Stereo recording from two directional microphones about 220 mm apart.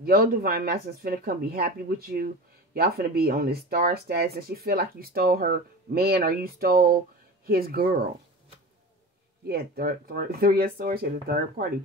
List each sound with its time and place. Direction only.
0.0 s speech: 40° right (ahead or behind)
9.5 s speech: 45° right (ahead or behind)